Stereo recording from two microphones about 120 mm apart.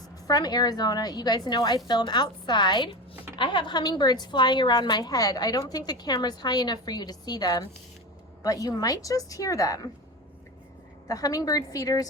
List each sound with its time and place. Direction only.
0.3 s a woman's voice: 35° left (ahead or behind)
11.1 s a woman's voice: 30° left (ahead or behind)